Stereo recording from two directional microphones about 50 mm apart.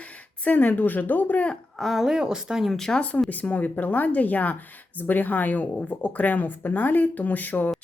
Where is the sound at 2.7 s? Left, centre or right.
Centre.